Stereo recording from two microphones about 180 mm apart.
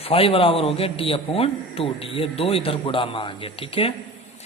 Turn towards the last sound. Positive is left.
turn(degrees=30)  # may be behind; listen again after turning